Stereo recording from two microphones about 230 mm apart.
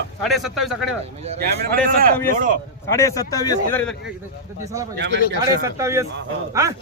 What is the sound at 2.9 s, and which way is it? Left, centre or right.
A man's voice, centre.